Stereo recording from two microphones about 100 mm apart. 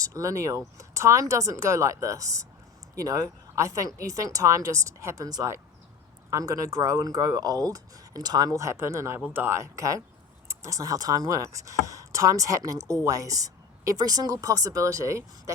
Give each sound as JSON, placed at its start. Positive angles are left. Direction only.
{"t": 0.0, "sound": "speech", "side_deg": -30}